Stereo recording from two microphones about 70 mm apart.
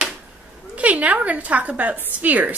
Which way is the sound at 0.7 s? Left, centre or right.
Right.